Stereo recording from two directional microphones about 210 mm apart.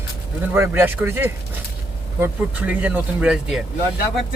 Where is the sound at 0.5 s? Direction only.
10° right (ahead or behind).